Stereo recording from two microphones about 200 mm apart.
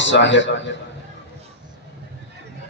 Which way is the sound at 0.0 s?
65° left (ahead or behind).